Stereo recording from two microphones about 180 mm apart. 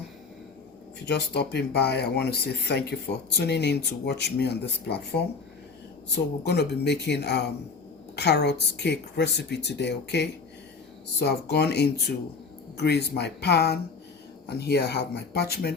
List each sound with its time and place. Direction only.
0.9 s speech: 65° left (ahead or behind)